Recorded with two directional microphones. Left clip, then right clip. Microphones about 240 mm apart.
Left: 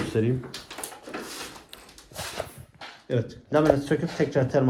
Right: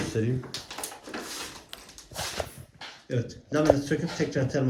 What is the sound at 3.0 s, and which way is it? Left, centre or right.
Speech, left.